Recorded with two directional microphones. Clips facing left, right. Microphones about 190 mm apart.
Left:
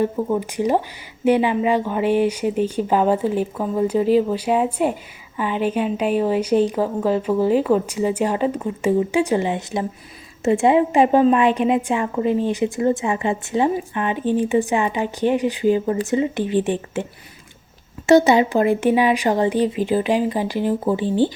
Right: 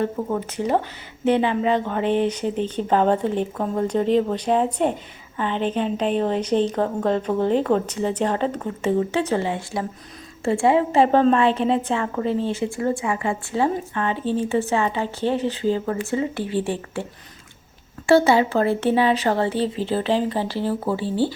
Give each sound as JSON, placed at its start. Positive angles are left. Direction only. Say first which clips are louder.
{"t": 0.3, "sound": "a woman's voice", "louder": "left 2 dB", "side_deg": 15}